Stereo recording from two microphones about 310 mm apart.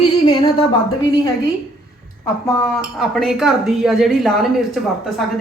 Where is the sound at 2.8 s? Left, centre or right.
Centre.